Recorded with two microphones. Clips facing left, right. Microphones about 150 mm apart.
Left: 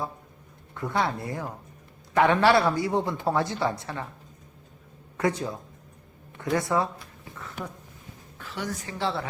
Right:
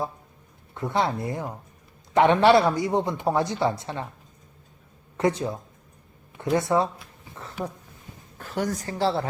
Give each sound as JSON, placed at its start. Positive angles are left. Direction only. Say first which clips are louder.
{"t": 0.7, "sound": "speech", "louder": "right 2 dB", "side_deg": -20}
{"t": 5.1, "sound": "a woman's voice", "louder": "right 3 dB", "side_deg": -25}
{"t": 8.4, "sound": "a woman's voice", "louder": "right 6 dB", "side_deg": -45}